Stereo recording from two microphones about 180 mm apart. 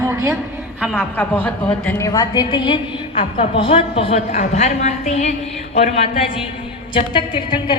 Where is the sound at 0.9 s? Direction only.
10° left (ahead or behind); by 6.3 s 35° left (ahead or behind).